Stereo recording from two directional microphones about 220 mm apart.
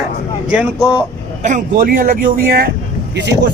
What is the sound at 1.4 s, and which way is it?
A man's voice, 35° right (ahead or behind).